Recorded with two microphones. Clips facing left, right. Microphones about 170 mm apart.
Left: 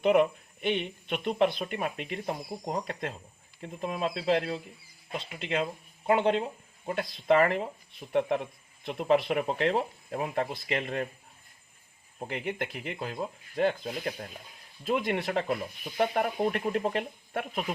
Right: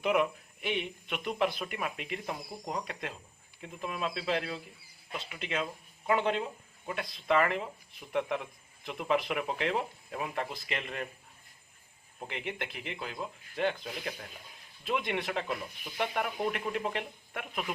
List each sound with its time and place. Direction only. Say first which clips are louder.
0.0 s speech: left 5 dB; 30° left (ahead or behind)
12.3 s speech: left 5 dB; 40° left (ahead or behind)